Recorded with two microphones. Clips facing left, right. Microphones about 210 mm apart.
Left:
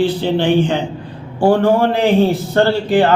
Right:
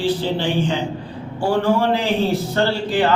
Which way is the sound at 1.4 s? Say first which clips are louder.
Left 5 dB; 55° left (ahead or behind).